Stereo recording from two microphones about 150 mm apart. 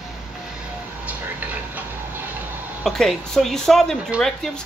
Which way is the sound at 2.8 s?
Centre (ahead or behind).